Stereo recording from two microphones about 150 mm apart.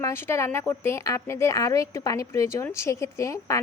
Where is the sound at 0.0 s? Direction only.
15° left (ahead or behind).